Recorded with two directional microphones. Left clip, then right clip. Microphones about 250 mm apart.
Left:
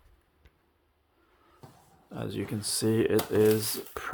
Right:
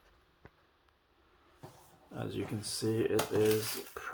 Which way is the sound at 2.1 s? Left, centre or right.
Left.